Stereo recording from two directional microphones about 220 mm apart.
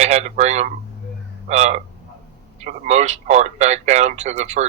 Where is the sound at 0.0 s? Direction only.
30° right (ahead or behind).